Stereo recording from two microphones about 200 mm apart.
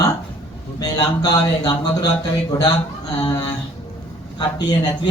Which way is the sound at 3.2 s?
20° left (ahead or behind).